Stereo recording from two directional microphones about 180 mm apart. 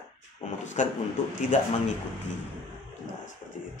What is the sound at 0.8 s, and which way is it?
Speech, 45° left (ahead or behind).